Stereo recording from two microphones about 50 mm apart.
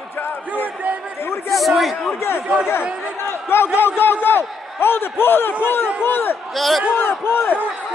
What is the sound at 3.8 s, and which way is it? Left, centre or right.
A man's voice, left.